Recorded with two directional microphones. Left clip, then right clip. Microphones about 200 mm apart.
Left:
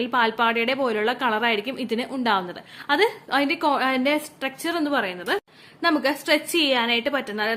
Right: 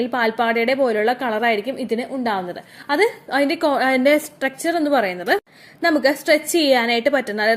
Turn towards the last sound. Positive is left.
turn(degrees=-20)  # may be behind; listen again after turning